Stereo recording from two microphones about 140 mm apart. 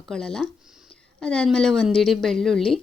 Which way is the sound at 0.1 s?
5° left (ahead or behind).